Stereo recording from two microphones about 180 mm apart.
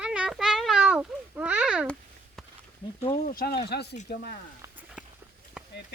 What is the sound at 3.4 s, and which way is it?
Speech, 65° left (ahead or behind).